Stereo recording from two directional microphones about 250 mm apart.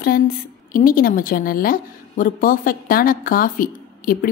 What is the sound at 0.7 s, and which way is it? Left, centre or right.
A woman's voice, left.